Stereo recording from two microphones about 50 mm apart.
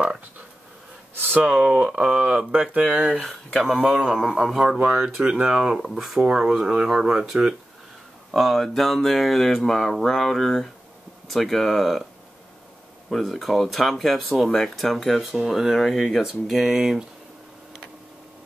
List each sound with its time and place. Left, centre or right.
1.1 s a sound: right
1.4 s speech: right; by 4.6 s centre
4.6 s speech: centre
4.9 s speech: centre
5.9 s speech: centre
6.3 s speech: centre
8.3 s speech: centre
13.1 s speech: centre